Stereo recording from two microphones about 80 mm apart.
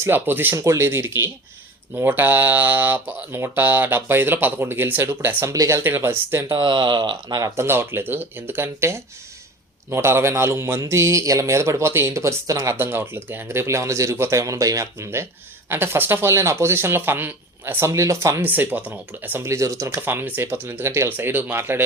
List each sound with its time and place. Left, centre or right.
0.0 s speech: right
0.5 s speech: right
6.6 s speech: right
7.4 s speech: right
12.7 s speech: right
18.4 s speech: right
19.4 s speech: right
20.0 s speech: right